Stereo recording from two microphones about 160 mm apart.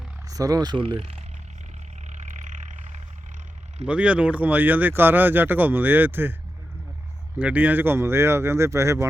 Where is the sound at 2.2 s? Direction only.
50° right (ahead or behind).